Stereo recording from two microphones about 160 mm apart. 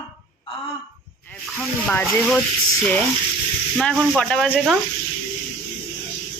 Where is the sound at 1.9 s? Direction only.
5° left (ahead or behind).